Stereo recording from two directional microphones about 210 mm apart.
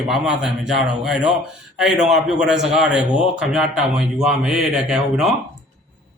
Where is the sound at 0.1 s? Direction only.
Centre (ahead or behind).